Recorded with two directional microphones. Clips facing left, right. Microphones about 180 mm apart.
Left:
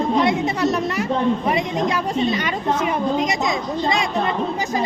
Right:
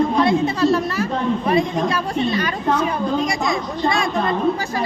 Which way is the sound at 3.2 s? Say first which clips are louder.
Even; 20° left (ahead or behind).